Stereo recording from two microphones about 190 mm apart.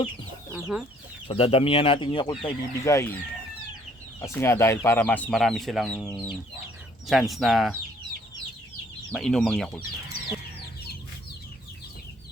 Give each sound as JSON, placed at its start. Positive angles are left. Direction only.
{"t": 0.5, "sound": "speech", "side_deg": 0}
{"t": 1.3, "sound": "speech", "side_deg": 30}
{"t": 4.2, "sound": "speech", "side_deg": 15}
{"t": 7.1, "sound": "speech", "side_deg": 0}
{"t": 9.1, "sound": "speech", "side_deg": 0}